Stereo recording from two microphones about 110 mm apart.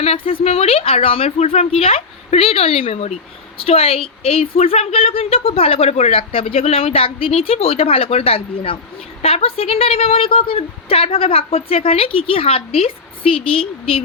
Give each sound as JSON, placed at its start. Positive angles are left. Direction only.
{"t": 0.0, "sound": "a woman's voice", "side_deg": 65}